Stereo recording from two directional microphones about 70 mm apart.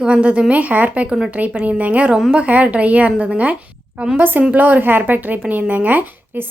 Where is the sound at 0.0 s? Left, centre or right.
Centre.